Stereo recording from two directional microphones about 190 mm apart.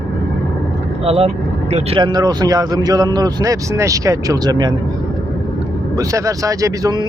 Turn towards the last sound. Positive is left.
turn(degrees=-20)  # may be behind; listen again after turning